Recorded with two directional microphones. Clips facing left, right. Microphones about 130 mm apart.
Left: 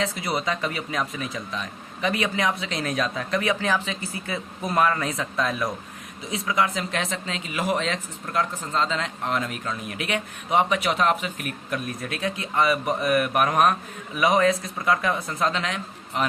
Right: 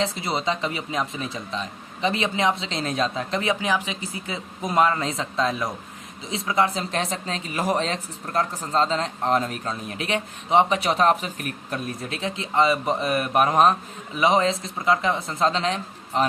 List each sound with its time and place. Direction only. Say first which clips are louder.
0.0 s speech: right 1 dB; 25° right (ahead or behind)